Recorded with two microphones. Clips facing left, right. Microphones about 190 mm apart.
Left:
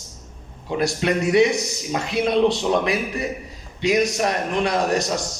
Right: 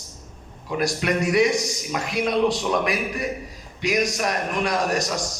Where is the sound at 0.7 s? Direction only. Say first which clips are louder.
Left 2 dB; 25° left (ahead or behind).